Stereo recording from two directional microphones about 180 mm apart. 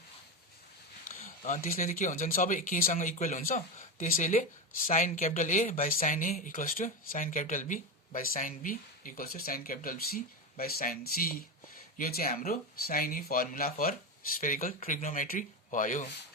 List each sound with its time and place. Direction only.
1.0 s speech: 45° left (ahead or behind)